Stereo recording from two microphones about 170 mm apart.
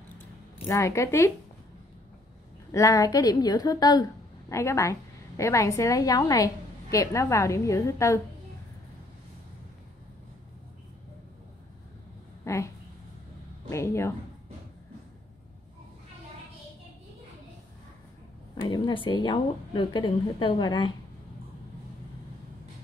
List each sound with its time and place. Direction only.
0.7 s speech: 15° left (ahead or behind)
2.7 s a woman's voice: 20° left (ahead or behind)
12.4 s speech: 15° left (ahead or behind)
18.6 s a woman's voice: 30° left (ahead or behind)